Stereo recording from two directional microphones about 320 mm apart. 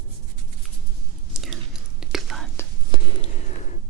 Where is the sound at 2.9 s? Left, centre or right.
Centre.